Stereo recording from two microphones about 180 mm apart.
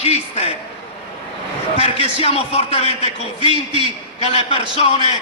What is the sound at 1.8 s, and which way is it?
A man's voice, 35° left (ahead or behind).